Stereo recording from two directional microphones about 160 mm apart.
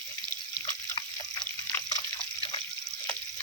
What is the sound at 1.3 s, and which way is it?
Water, 15° left (ahead or behind).